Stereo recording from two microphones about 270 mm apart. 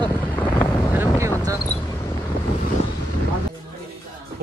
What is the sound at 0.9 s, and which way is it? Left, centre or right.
Wind noise, centre.